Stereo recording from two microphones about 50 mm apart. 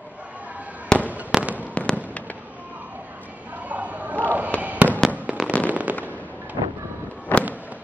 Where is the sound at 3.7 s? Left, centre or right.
Right.